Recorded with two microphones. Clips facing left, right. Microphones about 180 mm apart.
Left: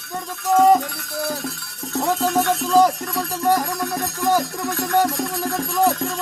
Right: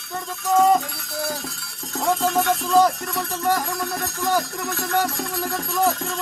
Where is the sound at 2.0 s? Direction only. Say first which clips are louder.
Even; 5° left (ahead or behind).